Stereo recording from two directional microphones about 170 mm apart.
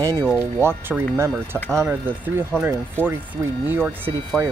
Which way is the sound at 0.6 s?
15° right (ahead or behind).